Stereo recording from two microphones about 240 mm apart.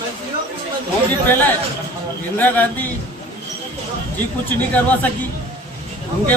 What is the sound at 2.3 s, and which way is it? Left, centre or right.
Speech, centre.